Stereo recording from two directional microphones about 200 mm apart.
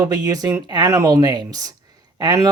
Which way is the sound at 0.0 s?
20° right (ahead or behind).